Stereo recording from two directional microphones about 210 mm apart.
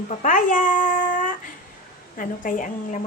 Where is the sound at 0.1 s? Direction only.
40° left (ahead or behind).